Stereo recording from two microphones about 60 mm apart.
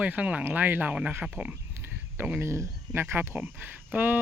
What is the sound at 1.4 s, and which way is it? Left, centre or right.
Speech, right.